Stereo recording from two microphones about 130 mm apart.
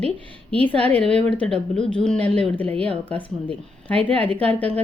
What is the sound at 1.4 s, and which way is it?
Speech, 5° left (ahead or behind).